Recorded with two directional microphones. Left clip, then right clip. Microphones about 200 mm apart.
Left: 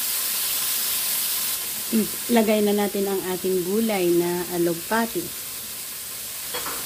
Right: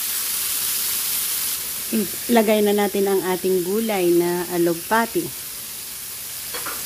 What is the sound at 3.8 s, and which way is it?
Frying, 15° right (ahead or behind).